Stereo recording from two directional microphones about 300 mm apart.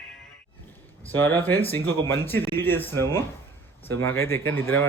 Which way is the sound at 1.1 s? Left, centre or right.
Centre.